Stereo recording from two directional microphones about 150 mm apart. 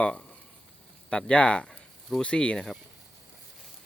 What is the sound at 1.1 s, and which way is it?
Speech, 5° left (ahead or behind).